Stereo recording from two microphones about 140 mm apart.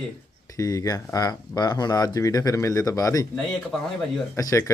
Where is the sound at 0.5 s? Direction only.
25° left (ahead or behind).